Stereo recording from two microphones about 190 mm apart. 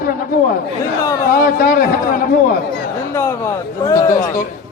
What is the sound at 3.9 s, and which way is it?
Speech, 15° left (ahead or behind).